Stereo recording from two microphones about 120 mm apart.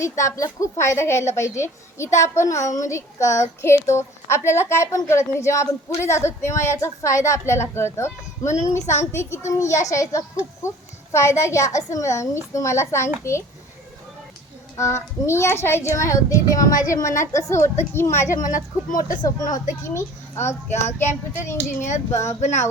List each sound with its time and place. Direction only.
0.0 s a woman's voice: 25° left (ahead or behind)
14.8 s a woman's voice: 25° left (ahead or behind)
18.5 s speech: 90° left
19.8 s a child's voice: 25° left (ahead or behind)
20.8 s speech: 75° left (ahead or behind)